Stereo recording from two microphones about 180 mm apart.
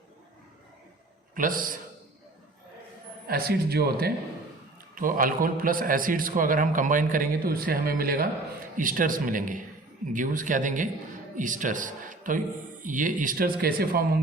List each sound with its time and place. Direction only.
1.4 s a man's voice: 50° right (ahead or behind)
3.2 s a man's voice: 55° right (ahead or behind)